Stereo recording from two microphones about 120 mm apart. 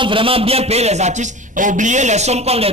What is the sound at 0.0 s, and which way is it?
A man's voice, 45° right (ahead or behind).